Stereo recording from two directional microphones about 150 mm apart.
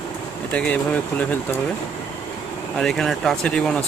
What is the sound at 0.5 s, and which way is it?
Speech, 10° left (ahead or behind).